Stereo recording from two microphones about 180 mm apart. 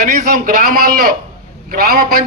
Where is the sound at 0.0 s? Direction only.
50° right (ahead or behind).